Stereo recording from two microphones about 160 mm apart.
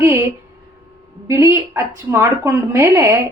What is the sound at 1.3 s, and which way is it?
A woman's voice, 15° right (ahead or behind).